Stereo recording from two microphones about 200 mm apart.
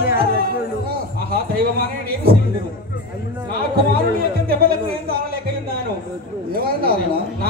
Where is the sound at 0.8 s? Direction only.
50° right (ahead or behind).